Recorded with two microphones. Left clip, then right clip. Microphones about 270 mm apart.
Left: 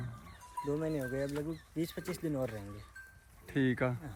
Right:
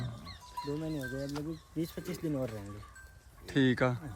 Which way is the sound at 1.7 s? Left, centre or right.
Centre.